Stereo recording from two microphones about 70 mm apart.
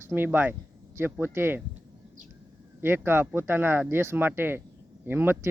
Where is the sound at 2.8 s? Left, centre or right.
Right.